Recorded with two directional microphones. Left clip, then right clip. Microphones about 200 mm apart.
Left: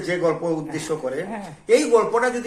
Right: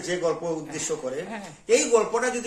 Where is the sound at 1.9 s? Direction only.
15° right (ahead or behind).